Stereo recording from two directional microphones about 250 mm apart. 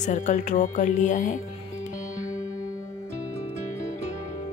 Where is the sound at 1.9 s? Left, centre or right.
Left.